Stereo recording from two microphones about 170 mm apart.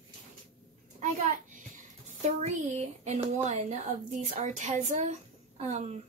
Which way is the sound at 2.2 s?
40° right (ahead or behind).